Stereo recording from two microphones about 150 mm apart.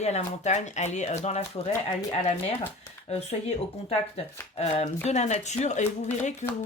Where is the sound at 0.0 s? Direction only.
50° left (ahead or behind).